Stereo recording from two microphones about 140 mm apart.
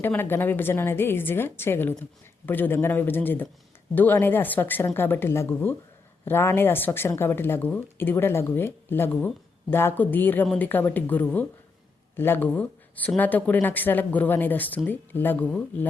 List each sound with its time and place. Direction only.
0.0 s speech: 15° left (ahead or behind)